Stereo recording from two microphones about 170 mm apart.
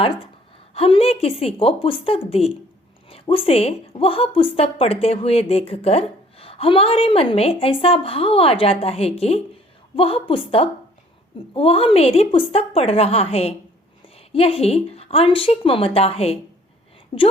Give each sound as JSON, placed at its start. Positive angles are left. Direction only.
{"t": 0.7, "sound": "a woman's voice", "side_deg": 35}